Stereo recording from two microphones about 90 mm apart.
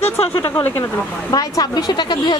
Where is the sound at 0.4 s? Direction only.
30° left (ahead or behind).